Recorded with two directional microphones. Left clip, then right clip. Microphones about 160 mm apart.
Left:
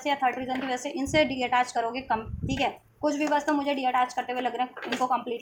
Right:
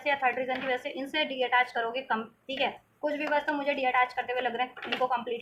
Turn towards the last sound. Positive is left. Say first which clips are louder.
# left 2 dB
turn(degrees=35)  # may be behind; listen again after turning